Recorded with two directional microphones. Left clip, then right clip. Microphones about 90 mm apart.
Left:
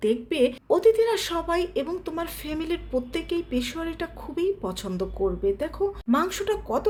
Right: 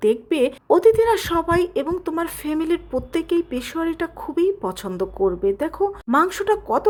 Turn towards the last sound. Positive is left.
turn(degrees=-45)  # may be behind; listen again after turning